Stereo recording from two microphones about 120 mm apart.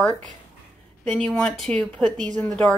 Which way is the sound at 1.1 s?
5° left (ahead or behind).